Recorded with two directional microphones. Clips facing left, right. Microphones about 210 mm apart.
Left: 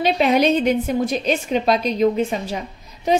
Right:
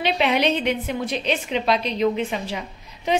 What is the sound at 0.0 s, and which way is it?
A woman's voice, 40° left (ahead or behind).